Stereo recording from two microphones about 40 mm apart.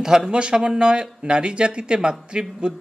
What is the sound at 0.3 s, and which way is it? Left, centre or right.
Speech, right.